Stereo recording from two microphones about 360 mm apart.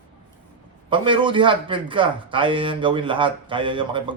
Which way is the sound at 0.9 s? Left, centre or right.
Centre.